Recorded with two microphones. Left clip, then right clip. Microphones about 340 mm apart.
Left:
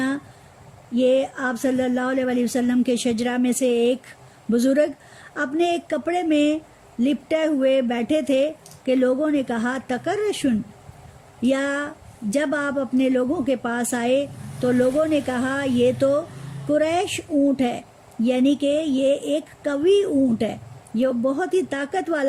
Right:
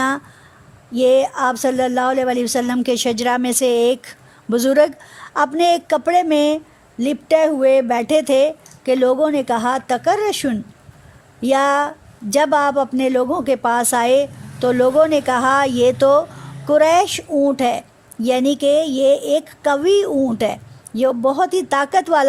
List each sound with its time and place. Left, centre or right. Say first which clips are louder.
0.9 s speech: right 6 dB; centre